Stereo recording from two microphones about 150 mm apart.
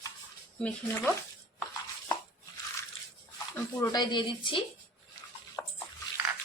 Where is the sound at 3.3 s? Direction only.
15° left (ahead or behind).